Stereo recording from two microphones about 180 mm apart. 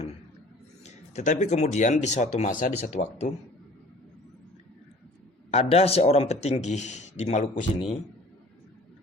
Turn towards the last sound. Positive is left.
turn(degrees=40)  # may be behind; listen again after turning